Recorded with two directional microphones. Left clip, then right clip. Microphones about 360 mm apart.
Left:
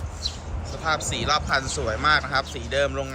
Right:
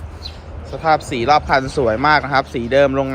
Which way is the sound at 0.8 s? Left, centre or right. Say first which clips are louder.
Right 10 dB; centre.